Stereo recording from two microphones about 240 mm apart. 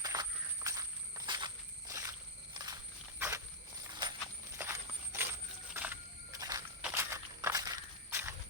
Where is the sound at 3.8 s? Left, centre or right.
Centre.